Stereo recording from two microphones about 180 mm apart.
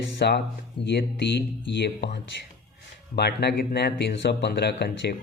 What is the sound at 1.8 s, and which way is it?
Speech, 70° left (ahead or behind).